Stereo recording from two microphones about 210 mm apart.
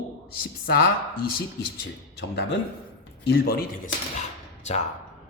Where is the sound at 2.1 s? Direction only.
55° left (ahead or behind).